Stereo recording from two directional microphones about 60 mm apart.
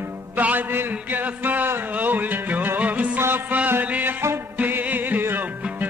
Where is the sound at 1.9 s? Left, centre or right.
Right.